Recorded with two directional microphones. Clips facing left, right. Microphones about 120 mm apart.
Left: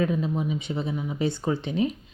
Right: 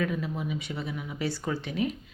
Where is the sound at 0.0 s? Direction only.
25° left (ahead or behind).